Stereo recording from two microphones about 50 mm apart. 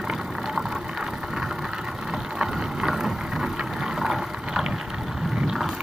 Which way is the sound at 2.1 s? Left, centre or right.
Centre.